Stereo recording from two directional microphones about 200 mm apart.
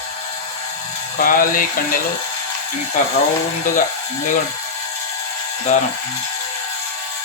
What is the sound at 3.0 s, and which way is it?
Music, 40° left (ahead or behind).